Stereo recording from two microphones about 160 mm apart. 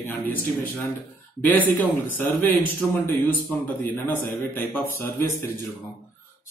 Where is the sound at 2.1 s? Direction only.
10° left (ahead or behind).